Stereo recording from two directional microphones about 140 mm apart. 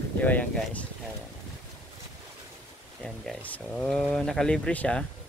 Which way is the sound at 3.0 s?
5° left (ahead or behind).